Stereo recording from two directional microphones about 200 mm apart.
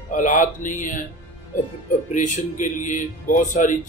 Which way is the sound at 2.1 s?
40° left (ahead or behind).